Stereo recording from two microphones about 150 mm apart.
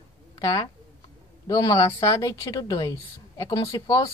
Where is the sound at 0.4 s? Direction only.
25° left (ahead or behind).